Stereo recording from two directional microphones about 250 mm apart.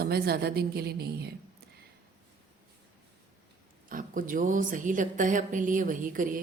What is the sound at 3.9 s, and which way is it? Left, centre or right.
A woman's voice, right.